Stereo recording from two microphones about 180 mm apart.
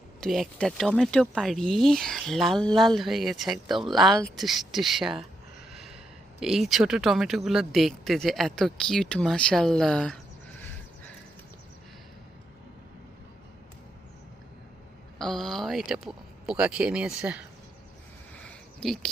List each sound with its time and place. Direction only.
0.2 s speech: centre (ahead or behind)
5.7 s gasp: centre (ahead or behind)
6.4 s speech: centre (ahead or behind)
15.2 s speech: centre (ahead or behind)
18.3 s a sound: 5° left (ahead or behind)